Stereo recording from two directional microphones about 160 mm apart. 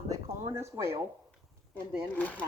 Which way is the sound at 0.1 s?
20° right (ahead or behind).